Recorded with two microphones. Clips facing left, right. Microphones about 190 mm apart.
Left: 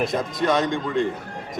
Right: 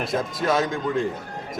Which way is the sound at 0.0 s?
Centre (ahead or behind).